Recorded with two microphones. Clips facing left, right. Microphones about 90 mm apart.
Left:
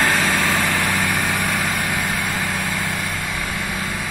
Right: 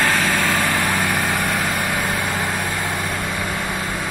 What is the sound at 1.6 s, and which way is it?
Vehicle, centre (ahead or behind).